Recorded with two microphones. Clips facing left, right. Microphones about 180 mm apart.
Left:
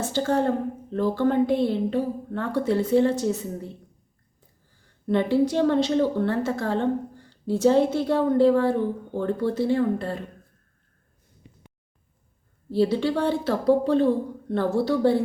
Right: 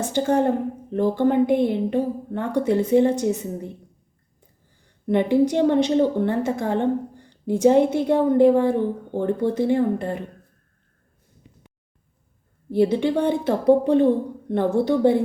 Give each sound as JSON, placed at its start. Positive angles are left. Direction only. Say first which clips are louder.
{"t": 0.0, "sound": "a woman's voice", "louder": "right 3 dB", "side_deg": -15}
{"t": 5.0, "sound": "a woman's voice", "louder": "right 3 dB", "side_deg": -15}
{"t": 12.7, "sound": "a woman's voice", "louder": "right 3 dB", "side_deg": -15}